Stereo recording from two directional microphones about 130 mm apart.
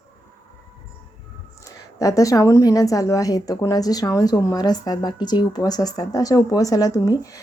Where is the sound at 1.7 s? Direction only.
25° left (ahead or behind).